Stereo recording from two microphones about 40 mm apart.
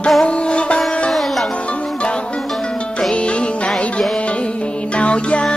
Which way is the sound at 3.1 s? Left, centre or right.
Left.